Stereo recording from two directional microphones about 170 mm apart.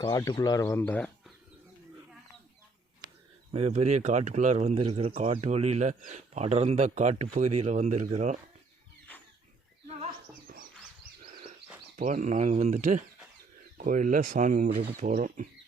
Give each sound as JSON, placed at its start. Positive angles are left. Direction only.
{"t": 0.0, "sound": "speech", "side_deg": 20}
{"t": 3.5, "sound": "speech", "side_deg": -40}
{"t": 9.1, "sound": "a sound", "side_deg": 10}
{"t": 11.9, "sound": "speech", "side_deg": -50}
{"t": 14.7, "sound": "speech", "side_deg": -65}
{"t": 15.0, "sound": "speech", "side_deg": -50}